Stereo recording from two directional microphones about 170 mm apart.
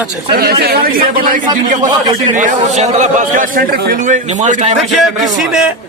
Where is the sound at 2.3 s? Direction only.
45° right (ahead or behind).